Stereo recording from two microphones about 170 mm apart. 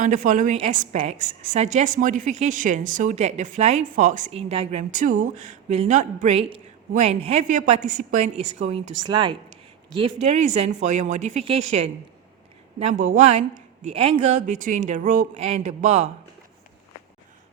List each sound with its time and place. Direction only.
0.0 s speech: 50° right (ahead or behind)
9.0 s speech: 30° right (ahead or behind)
9.9 s speech: 40° right (ahead or behind)